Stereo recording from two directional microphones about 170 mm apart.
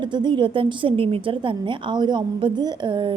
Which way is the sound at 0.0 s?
25° right (ahead or behind).